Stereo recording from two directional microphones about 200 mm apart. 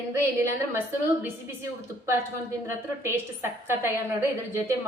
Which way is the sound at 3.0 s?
10° right (ahead or behind).